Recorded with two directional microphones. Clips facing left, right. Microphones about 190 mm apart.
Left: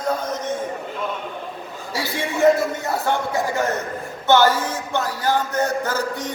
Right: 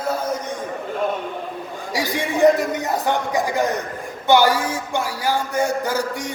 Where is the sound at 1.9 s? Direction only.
15° right (ahead or behind).